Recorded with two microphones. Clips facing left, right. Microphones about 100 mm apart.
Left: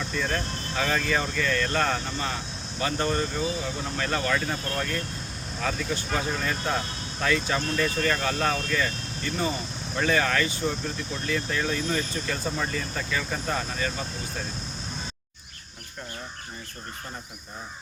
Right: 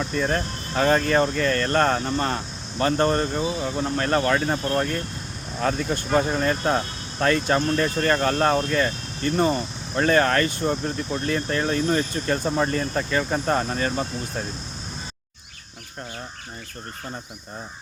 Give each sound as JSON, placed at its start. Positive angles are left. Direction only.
{"t": 0.1, "sound": "speech", "side_deg": -35}
{"t": 5.6, "sound": "speech", "side_deg": -50}
{"t": 6.3, "sound": "speech", "side_deg": -40}